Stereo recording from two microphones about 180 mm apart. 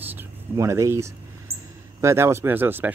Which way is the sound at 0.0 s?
10° right (ahead or behind).